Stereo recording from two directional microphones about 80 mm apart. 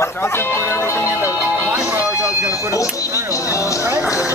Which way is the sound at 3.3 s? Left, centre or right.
Left.